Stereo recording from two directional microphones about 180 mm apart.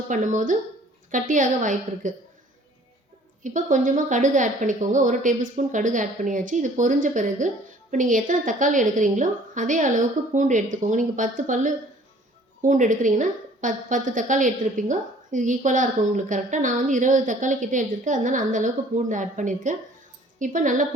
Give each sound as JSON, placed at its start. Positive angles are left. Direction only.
{"t": 0.1, "sound": "a woman's voice", "side_deg": -45}
{"t": 3.4, "sound": "a woman's voice", "side_deg": -45}